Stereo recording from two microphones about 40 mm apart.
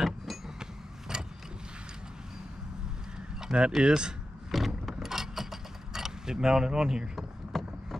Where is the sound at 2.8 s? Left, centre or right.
Centre.